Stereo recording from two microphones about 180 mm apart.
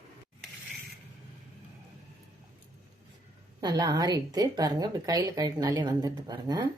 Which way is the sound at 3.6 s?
25° right (ahead or behind).